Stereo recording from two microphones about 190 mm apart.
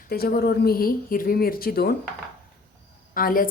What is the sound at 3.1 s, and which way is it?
Speech, 50° left (ahead or behind).